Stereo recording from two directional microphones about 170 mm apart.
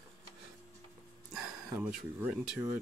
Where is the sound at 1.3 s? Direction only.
Centre (ahead or behind).